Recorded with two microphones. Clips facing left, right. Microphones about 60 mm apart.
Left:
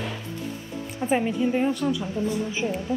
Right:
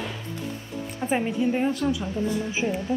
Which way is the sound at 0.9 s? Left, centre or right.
Centre.